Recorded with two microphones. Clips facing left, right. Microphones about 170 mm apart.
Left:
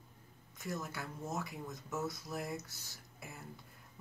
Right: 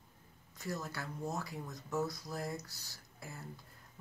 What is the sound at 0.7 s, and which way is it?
Speech, 20° left (ahead or behind).